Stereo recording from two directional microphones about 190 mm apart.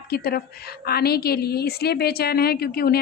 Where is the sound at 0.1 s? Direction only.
55° left (ahead or behind).